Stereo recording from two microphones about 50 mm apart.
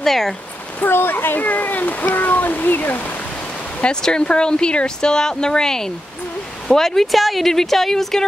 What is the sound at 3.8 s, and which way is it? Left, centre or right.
Speech, centre.